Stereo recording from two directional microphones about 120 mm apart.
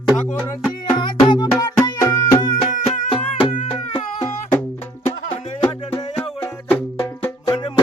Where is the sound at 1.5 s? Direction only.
25° left (ahead or behind).